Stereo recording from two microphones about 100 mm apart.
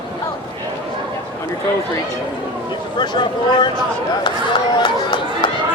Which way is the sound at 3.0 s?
50° left (ahead or behind).